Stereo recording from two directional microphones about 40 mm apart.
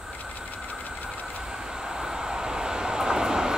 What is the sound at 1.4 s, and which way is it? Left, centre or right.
Train, centre.